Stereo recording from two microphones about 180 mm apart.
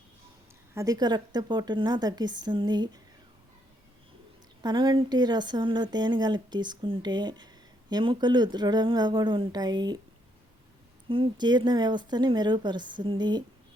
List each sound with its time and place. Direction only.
0.7 s speech: 20° right (ahead or behind)
4.6 s speech: 25° right (ahead or behind)
11.1 s speech: 25° right (ahead or behind)